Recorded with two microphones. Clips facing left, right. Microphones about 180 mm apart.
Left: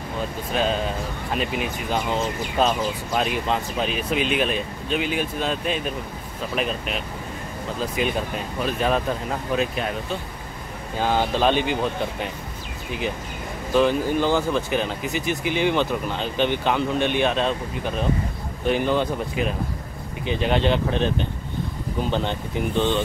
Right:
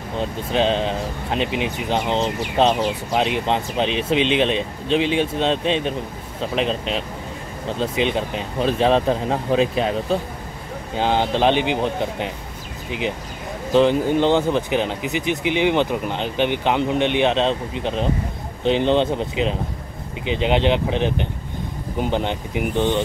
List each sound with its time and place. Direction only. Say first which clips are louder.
0.5 s speech: right 4 dB; 25° right (ahead or behind)
13.7 s speech: right 3 dB; 20° right (ahead or behind)